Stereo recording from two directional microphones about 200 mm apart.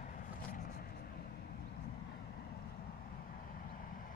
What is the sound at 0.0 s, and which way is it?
Vehicle, 40° left (ahead or behind).